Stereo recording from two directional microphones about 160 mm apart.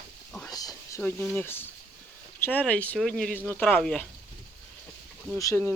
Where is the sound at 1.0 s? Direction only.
10° left (ahead or behind).